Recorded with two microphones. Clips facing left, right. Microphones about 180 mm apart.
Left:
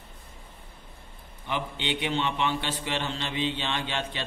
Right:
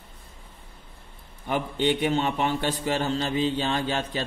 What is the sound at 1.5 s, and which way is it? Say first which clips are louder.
A man's voice: right 7 dB; 45° right (ahead or behind).